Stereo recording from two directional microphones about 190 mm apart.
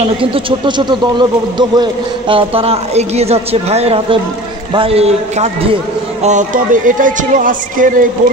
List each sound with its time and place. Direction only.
0.0 s a man's voice: 30° right (ahead or behind); by 8.1 s 45° right (ahead or behind)